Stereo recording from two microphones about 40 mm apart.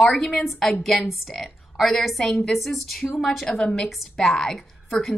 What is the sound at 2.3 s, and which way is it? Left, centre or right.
Speech, centre.